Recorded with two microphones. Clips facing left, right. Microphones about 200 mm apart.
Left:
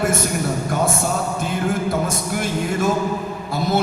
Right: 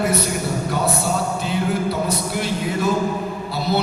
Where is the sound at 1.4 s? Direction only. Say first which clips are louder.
Even; 50° left (ahead or behind).